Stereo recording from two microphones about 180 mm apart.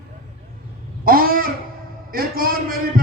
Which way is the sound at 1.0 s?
55° right (ahead or behind).